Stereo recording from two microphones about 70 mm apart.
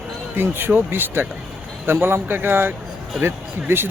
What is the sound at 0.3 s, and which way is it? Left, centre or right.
Speech, right.